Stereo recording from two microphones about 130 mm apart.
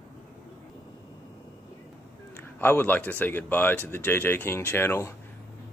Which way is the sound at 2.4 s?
15° left (ahead or behind).